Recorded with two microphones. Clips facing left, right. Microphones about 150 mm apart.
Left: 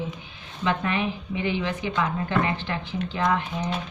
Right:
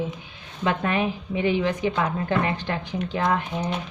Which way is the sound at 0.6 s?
45° right (ahead or behind).